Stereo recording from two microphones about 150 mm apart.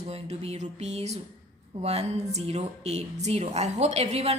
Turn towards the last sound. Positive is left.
turn(degrees=-45)  # may be behind; listen again after turning